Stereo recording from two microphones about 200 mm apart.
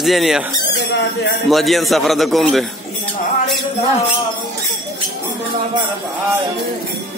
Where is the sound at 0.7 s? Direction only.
60° left (ahead or behind).